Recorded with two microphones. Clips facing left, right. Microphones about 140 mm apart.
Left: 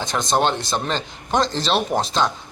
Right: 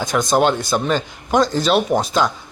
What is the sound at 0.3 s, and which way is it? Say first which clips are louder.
Speech: right 3 dB; 5° right (ahead or behind).